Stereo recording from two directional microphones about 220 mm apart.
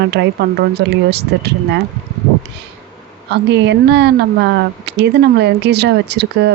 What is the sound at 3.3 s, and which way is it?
Speech, 50° right (ahead or behind).